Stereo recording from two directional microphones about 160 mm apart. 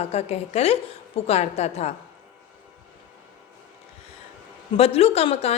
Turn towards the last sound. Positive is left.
turn(degrees=40)  # may be behind; listen again after turning